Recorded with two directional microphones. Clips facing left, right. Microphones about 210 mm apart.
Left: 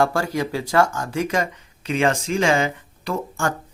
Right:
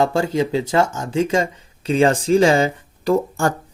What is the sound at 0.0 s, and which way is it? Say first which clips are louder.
Speech: right 3 dB; 20° right (ahead or behind).